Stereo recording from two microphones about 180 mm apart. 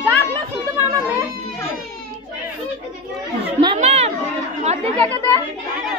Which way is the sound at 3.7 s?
35° right (ahead or behind).